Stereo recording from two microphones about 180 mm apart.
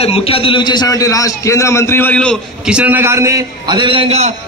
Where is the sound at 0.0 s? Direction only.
35° left (ahead or behind); by 2.3 s 10° left (ahead or behind).